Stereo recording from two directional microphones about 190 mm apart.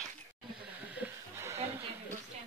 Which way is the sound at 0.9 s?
10° right (ahead or behind).